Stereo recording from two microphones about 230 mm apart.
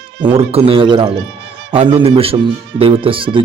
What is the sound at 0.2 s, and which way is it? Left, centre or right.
Speech, right.